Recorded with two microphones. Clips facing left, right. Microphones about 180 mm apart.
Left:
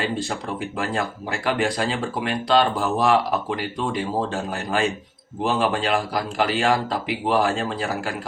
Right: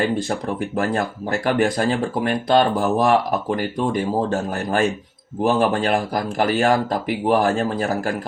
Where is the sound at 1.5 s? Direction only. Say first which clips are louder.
Right 4 dB; 45° right (ahead or behind).